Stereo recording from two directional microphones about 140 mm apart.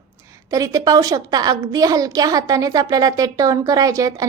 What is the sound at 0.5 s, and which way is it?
A woman's voice, 25° right (ahead or behind).